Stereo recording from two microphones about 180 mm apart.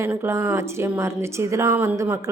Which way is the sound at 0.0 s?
15° right (ahead or behind).